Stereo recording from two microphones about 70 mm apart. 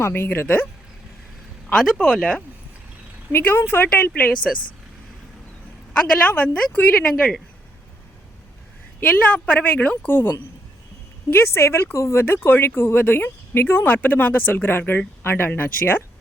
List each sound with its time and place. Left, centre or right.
0.0 s a woman's voice: left
1.7 s speech: centre
3.3 s a woman's voice: left
5.9 s a woman's voice: left
9.0 s a woman's voice: left
11.3 s speech: left
12.2 s speech: left